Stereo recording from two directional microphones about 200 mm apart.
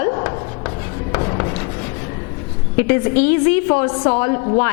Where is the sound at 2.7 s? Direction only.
15° left (ahead or behind).